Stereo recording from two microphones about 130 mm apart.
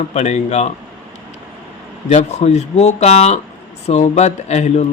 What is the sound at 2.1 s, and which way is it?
Speech, 60° left (ahead or behind).